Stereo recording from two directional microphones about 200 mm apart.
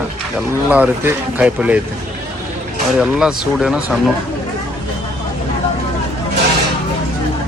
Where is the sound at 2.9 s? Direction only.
5° right (ahead or behind).